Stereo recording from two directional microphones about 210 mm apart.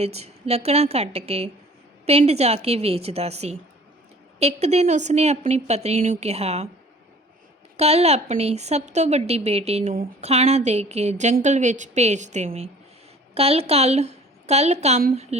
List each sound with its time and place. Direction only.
0.0 s a woman's voice: 30° right (ahead or behind)
7.8 s a woman's voice: 30° right (ahead or behind)